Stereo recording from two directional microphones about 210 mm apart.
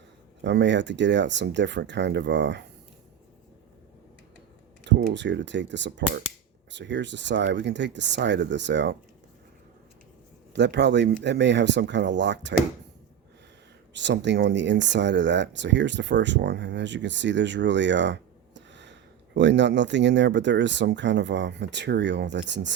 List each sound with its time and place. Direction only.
0.4 s speech: 55° right (ahead or behind)
5.1 s speech: 60° right (ahead or behind)
10.5 s speech: 55° right (ahead or behind)
13.9 s speech: 55° right (ahead or behind)